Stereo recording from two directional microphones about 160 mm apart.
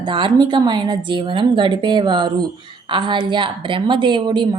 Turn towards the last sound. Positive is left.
turn(degrees=-30)  # may be behind; listen again after turning